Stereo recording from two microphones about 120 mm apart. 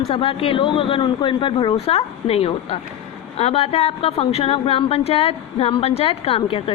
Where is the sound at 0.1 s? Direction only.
50° left (ahead or behind).